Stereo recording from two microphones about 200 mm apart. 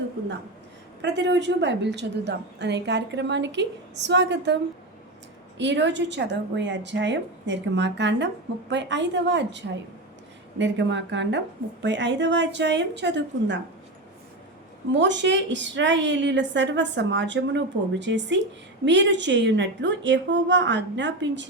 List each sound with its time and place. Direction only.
1.0 s a woman's voice: 60° right (ahead or behind)
14.9 s a woman's voice: 65° right (ahead or behind)